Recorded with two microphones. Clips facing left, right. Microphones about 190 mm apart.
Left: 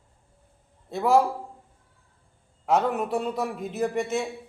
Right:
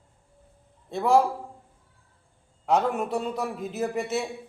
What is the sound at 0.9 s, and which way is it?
Speech, centre (ahead or behind).